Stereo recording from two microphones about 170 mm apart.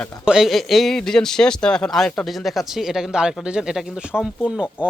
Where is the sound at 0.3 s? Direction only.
Centre (ahead or behind).